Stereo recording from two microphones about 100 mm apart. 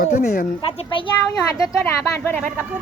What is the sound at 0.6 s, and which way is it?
Speech, 75° left (ahead or behind).